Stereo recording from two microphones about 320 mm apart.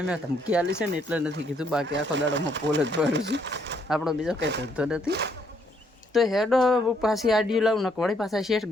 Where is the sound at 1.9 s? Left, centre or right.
Right.